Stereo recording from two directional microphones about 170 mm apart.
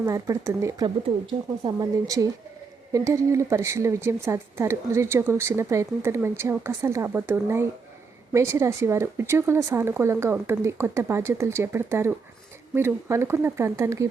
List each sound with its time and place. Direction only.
0.0 s a woman's voice: 15° right (ahead or behind)